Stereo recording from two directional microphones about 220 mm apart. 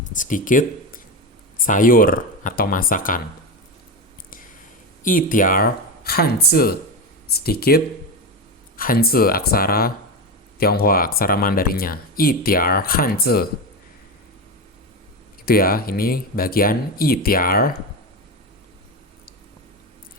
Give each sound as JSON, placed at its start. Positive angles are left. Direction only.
{"t": 0.0, "sound": "speech", "side_deg": 35}
{"t": 5.0, "sound": "speech", "side_deg": 40}
{"t": 15.4, "sound": "speech", "side_deg": 40}